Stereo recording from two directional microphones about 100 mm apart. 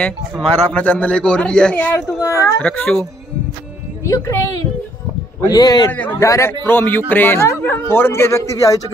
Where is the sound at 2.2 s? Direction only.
30° left (ahead or behind).